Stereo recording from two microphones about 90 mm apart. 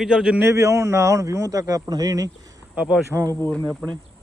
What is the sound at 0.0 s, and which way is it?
Speech, 10° right (ahead or behind).